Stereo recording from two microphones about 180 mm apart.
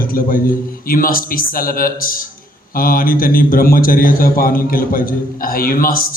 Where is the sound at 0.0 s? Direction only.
50° left (ahead or behind).